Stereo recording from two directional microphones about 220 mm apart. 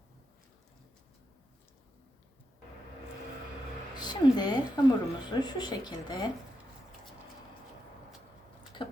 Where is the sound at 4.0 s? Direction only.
20° left (ahead or behind).